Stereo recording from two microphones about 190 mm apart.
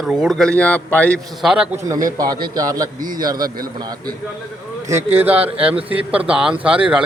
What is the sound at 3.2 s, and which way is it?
Speech, 20° right (ahead or behind).